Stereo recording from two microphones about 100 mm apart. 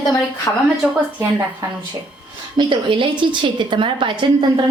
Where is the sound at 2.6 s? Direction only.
55° right (ahead or behind).